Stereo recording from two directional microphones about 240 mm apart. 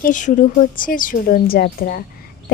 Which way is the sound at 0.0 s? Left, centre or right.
Left.